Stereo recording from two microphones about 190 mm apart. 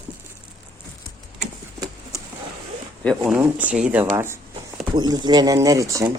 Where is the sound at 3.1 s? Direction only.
Centre (ahead or behind).